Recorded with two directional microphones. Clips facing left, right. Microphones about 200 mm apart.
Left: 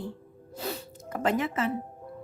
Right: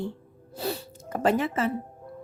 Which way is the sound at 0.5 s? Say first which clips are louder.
Right 4 dB; 30° right (ahead or behind).